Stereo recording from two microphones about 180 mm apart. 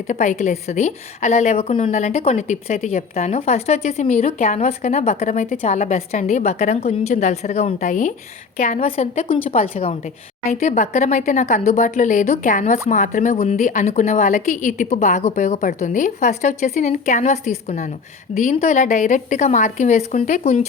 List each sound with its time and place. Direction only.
0.1 s a woman's voice: 40° left (ahead or behind)
10.5 s a woman's voice: 45° left (ahead or behind)